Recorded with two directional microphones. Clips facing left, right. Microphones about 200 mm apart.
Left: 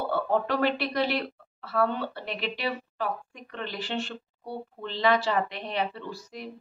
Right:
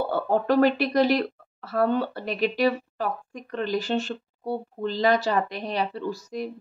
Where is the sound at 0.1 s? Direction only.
40° right (ahead or behind).